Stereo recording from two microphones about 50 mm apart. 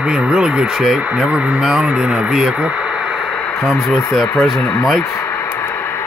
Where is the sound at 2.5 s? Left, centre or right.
Centre.